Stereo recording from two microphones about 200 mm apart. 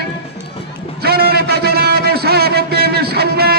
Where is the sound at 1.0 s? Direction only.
50° right (ahead or behind).